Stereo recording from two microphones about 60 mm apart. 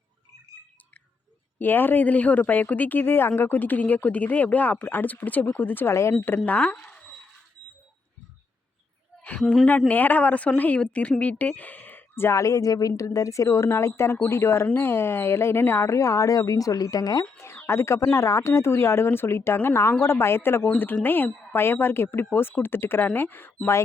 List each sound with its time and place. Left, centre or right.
1.5 s speech: left
5.9 s speech: left
6.2 s speech: left
9.9 s speech: left
12.3 s speech: left
13.1 s speech: left
17.3 s a sound: left
17.7 s speech: left